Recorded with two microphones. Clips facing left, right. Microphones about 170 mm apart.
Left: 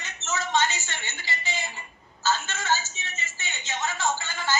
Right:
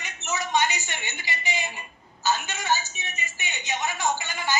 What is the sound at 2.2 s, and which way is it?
A woman's voice, 15° right (ahead or behind).